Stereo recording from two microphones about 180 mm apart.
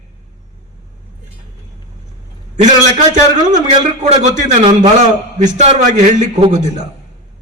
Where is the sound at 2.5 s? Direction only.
40° right (ahead or behind).